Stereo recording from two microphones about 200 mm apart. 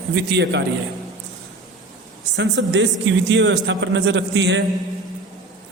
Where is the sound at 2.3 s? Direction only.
65° right (ahead or behind).